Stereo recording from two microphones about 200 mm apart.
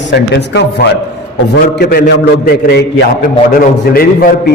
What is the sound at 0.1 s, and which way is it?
A man's voice, 60° left (ahead or behind).